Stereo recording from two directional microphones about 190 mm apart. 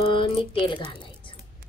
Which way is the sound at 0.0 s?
25° left (ahead or behind).